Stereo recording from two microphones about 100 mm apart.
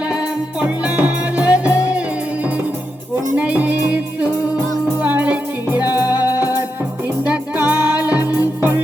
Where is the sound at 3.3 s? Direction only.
15° right (ahead or behind).